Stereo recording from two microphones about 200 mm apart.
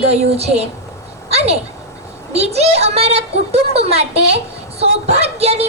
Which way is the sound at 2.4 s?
30° right (ahead or behind).